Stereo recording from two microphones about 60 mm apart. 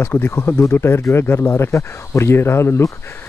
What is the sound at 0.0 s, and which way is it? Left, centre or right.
Speech, left.